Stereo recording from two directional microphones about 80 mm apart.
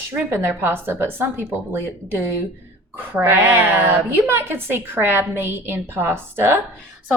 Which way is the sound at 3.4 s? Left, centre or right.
Right.